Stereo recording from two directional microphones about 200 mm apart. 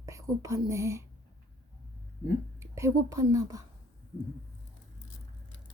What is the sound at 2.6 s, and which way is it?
A woman's voice, 15° right (ahead or behind).